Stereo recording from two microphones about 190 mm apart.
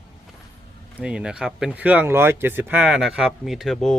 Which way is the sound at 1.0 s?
5° right (ahead or behind).